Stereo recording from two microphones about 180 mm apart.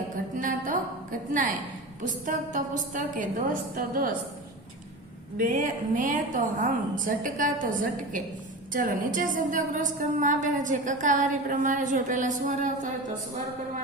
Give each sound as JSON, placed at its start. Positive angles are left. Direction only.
{"t": 0.3, "sound": "a sound", "side_deg": -45}
{"t": 2.2, "sound": "a woman's voice", "side_deg": -45}
{"t": 5.4, "sound": "a woman's voice", "side_deg": -50}